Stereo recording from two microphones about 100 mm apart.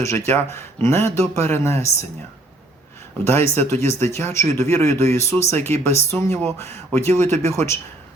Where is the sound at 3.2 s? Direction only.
25° left (ahead or behind).